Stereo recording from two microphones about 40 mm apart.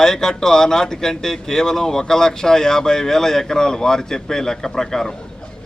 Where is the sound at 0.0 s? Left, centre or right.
Centre.